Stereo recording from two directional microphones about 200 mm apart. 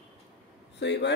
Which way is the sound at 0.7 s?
60° left (ahead or behind).